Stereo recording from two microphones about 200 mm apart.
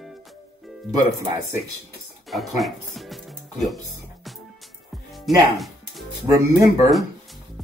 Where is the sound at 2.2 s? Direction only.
Centre (ahead or behind).